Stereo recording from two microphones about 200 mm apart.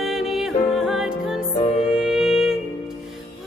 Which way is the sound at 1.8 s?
5° right (ahead or behind).